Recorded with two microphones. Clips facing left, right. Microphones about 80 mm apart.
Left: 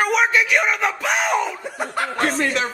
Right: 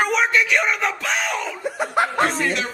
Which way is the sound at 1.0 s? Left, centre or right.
Centre.